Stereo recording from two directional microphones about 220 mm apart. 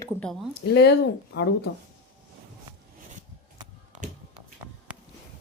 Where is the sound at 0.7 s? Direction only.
50° left (ahead or behind).